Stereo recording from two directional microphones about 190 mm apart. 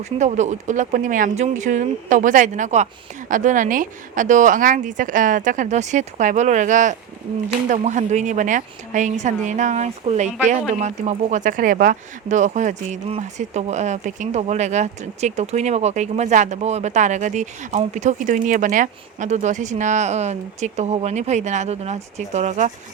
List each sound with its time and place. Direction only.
0.2 s speech: 35° right (ahead or behind)